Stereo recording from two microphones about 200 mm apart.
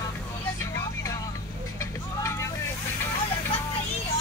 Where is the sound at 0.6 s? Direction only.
15° left (ahead or behind).